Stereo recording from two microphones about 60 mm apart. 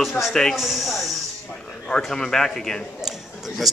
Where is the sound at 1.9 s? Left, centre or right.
Centre.